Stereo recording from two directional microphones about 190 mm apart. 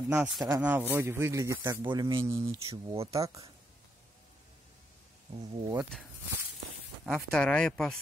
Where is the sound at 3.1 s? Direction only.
15° right (ahead or behind).